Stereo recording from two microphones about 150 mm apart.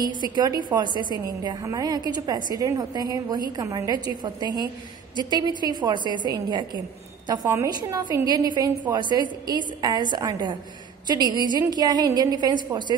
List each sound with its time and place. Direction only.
0.4 s a woman's voice: 30° right (ahead or behind)